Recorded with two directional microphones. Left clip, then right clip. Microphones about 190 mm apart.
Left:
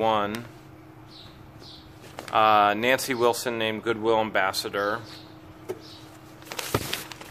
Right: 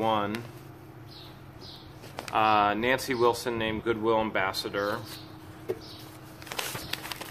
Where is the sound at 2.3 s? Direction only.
55° left (ahead or behind).